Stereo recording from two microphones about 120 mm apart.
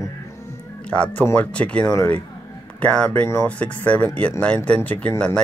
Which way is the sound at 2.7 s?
10° left (ahead or behind).